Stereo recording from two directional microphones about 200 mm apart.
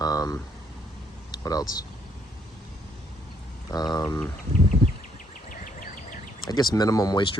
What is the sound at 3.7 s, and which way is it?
Speech, 20° left (ahead or behind).